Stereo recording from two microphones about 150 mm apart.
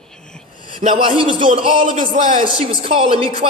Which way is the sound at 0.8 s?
35° right (ahead or behind).